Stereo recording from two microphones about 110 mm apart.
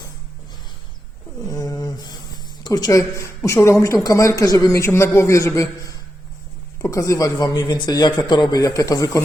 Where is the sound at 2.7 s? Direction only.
30° left (ahead or behind).